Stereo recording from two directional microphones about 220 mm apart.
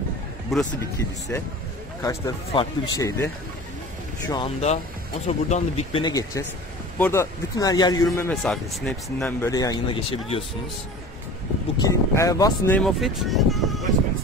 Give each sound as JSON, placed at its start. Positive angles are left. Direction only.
{"t": 0.5, "sound": "speech", "side_deg": 0}
{"t": 1.3, "sound": "speech", "side_deg": 10}
{"t": 4.3, "sound": "speech", "side_deg": 25}
{"t": 9.5, "sound": "speech", "side_deg": 15}
{"t": 11.8, "sound": "speech", "side_deg": 15}